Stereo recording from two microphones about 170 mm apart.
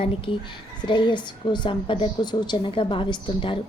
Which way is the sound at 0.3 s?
30° left (ahead or behind).